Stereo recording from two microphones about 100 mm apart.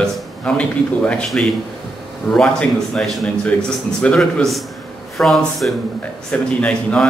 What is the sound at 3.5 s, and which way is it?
Speech, 15° left (ahead or behind).